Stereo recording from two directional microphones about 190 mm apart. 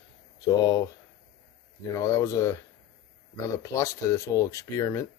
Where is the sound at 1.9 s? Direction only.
15° left (ahead or behind).